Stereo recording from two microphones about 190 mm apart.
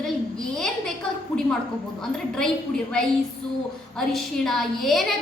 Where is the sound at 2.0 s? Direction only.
Centre (ahead or behind).